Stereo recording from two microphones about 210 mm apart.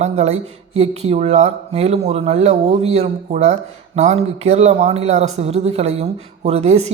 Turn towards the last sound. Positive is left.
turn(degrees=-30)  # may be behind; listen again after turning